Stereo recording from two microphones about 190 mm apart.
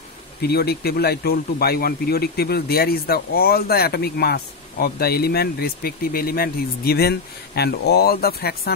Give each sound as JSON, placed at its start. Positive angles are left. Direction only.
{"t": 0.4, "sound": "a man's voice", "side_deg": 55}